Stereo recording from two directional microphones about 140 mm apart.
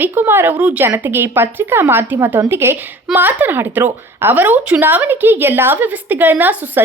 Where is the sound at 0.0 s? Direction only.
15° right (ahead or behind).